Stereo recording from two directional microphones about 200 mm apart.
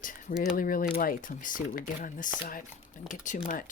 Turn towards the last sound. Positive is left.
turn(degrees=40)  # may be behind; listen again after turning